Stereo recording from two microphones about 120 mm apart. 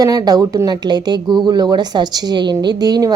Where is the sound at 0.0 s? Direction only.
30° right (ahead or behind).